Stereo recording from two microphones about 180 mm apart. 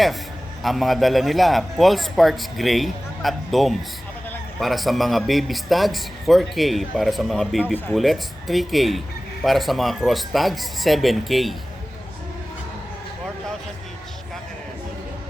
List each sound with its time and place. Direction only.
0.6 s a man's voice: centre (ahead or behind)